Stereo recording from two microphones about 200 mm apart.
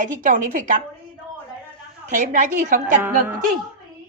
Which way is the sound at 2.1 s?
40° right (ahead or behind).